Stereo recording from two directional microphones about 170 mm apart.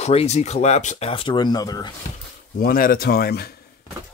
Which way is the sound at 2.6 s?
60° left (ahead or behind).